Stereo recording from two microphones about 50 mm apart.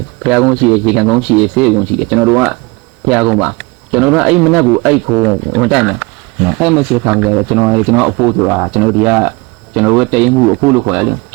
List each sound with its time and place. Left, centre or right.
0.2 s speech: centre